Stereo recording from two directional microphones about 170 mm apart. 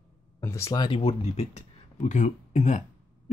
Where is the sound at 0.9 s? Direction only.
35° left (ahead or behind).